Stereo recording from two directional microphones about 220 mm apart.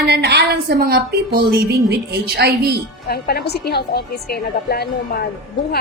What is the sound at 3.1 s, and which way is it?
A woman's voice, 45° left (ahead or behind).